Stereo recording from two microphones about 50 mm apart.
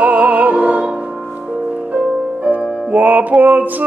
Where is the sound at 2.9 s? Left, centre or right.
Right.